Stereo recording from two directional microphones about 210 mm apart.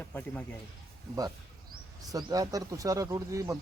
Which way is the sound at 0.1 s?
10° left (ahead or behind).